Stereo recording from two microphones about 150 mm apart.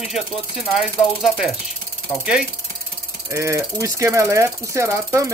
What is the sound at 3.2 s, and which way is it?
Mechanisms, 20° right (ahead or behind).